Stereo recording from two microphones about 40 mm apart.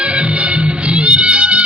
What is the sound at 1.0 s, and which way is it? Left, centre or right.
Music, right.